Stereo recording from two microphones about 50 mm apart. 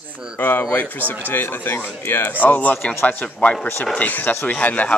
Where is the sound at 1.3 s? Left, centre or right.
Left.